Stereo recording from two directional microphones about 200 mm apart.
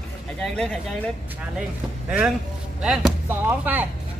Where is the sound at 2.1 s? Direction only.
5° right (ahead or behind).